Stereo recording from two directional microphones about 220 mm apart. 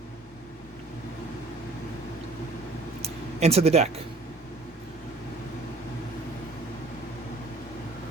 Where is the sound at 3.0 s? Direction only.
30° right (ahead or behind).